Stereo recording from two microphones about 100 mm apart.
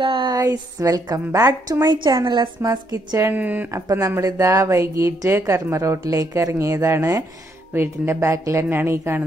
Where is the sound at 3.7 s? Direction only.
30° right (ahead or behind).